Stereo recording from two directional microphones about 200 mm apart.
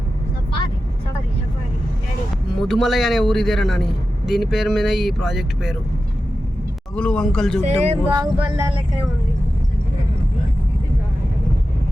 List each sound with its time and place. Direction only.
2.6 s speech: centre (ahead or behind)
6.9 s speech: 5° left (ahead or behind)
7.6 s speech: 35° right (ahead or behind)
8.1 s a sound: 20° right (ahead or behind)